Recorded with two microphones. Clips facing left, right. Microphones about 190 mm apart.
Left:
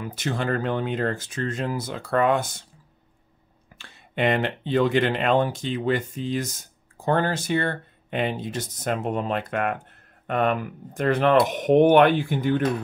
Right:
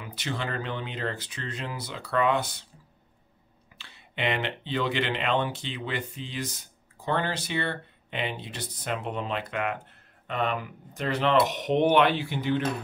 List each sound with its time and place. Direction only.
0.0 s speech: 45° left (ahead or behind)
3.7 s speech: 45° left (ahead or behind)